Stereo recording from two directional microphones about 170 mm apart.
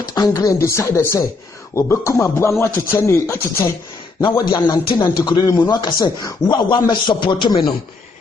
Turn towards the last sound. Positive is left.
turn(degrees=25)  # may be behind; listen again after turning